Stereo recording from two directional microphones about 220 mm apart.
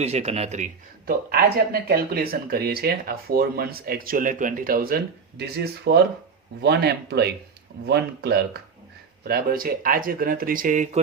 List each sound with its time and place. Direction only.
0.0 s speech: 30° right (ahead or behind)